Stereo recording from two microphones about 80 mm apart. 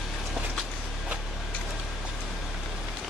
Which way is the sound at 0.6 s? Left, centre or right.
Centre.